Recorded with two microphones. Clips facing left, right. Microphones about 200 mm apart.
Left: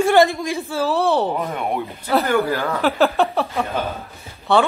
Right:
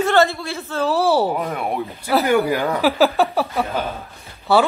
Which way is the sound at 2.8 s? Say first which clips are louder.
Right 1 dB; 5° right (ahead or behind).